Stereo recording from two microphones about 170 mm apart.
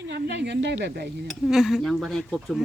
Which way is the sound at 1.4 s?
Centre (ahead or behind).